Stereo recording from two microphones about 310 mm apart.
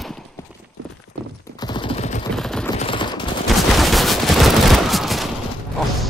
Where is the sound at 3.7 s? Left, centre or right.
Centre.